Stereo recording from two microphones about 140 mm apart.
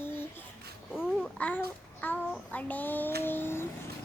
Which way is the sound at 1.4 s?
10° left (ahead or behind).